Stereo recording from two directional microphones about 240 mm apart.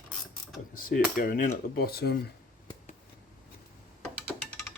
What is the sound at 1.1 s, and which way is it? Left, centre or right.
Speech, left.